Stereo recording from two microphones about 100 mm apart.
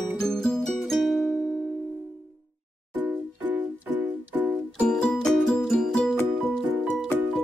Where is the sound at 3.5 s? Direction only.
15° right (ahead or behind).